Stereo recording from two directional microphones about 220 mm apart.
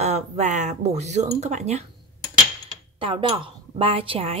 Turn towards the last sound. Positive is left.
turn(degrees=-25)  # may be behind; listen again after turning